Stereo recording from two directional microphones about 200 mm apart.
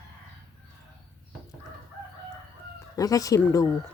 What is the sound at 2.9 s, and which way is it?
Speech, 15° left (ahead or behind).